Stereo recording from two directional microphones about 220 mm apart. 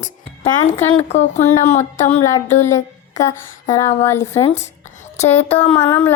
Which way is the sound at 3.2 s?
35° left (ahead or behind).